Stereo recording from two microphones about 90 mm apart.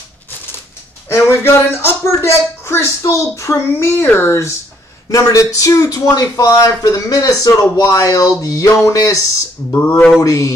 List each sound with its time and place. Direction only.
1.0 s speech: 30° left (ahead or behind)
9.8 s a sound: 25° left (ahead or behind)
10.2 s speech: 35° left (ahead or behind)